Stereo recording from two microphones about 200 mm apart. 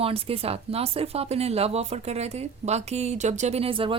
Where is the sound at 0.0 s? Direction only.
30° right (ahead or behind).